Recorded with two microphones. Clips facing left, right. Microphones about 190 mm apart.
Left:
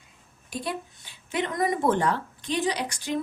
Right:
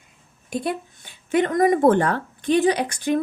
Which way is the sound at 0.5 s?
55° right (ahead or behind).